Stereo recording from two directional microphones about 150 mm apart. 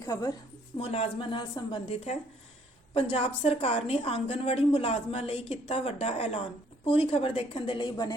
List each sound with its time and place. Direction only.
0.0 s a woman's voice: 25° left (ahead or behind)
0.8 s a woman's voice: 40° left (ahead or behind)